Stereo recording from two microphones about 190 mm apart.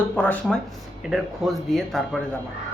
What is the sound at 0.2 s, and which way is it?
Speech, 5° left (ahead or behind).